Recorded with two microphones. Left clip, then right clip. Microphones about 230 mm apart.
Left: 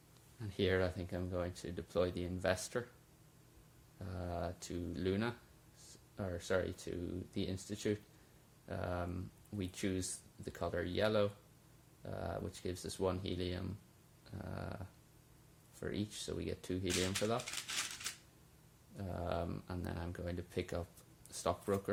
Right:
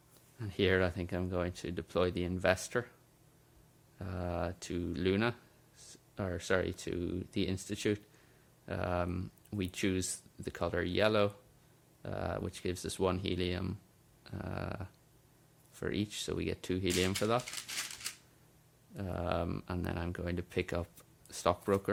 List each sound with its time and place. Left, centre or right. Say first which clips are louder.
0.3 s speech: right 5 dB; right
3.9 s speech: right 5 dB; right
17.4 s speech: right 1 dB; centre
18.9 s speech: right 5 dB; right